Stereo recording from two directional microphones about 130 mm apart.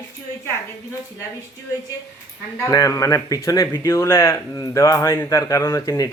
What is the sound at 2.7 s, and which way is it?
Speech, 25° left (ahead or behind).